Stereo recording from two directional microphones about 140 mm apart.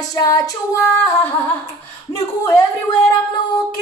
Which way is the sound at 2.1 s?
25° left (ahead or behind).